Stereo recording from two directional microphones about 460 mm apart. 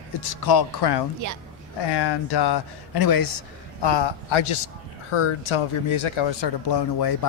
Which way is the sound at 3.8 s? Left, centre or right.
Left.